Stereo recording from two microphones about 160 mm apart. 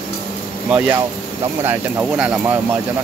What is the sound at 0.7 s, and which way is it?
Speech, 10° right (ahead or behind).